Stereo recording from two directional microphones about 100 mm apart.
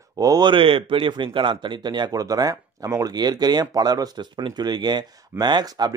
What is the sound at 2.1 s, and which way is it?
A man's voice, 35° right (ahead or behind).